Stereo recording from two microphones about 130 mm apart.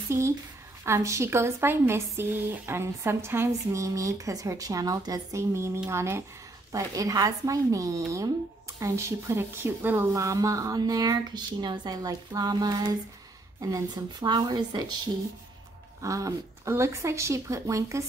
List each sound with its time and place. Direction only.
0.8 s a woman's voice: 20° right (ahead or behind)
16.0 s a woman's voice: 25° right (ahead or behind)